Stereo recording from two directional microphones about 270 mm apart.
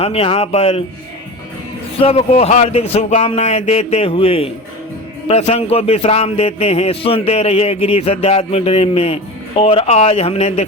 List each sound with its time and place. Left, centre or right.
0.0 s a man's voice: left
2.0 s a man's voice: left